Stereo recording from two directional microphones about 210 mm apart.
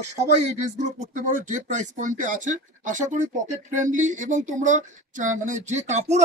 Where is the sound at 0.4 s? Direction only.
35° right (ahead or behind).